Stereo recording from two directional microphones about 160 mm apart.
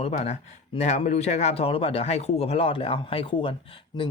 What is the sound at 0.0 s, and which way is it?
Speech, 45° left (ahead or behind).